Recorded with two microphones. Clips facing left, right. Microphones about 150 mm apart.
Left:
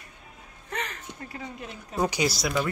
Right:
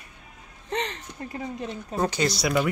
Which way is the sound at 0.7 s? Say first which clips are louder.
Right 5 dB; 25° right (ahead or behind).